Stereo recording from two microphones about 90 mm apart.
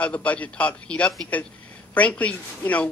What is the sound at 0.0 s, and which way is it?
Speech, 15° left (ahead or behind).